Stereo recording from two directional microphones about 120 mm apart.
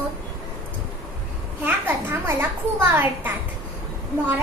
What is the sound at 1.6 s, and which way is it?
A child's voice, 15° right (ahead or behind).